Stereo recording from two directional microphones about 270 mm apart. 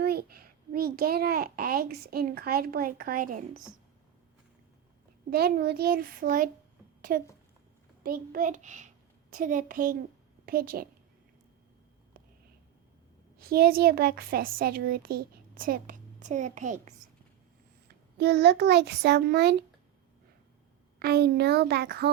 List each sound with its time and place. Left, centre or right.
0.0 s a child's voice: right
5.3 s a child's voice: right
13.4 s a child's voice: right
17.8 s a child's voice: right
21.0 s a child's voice: right